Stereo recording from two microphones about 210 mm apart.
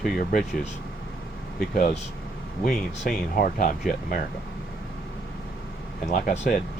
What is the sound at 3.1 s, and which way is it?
Speech, 40° left (ahead or behind).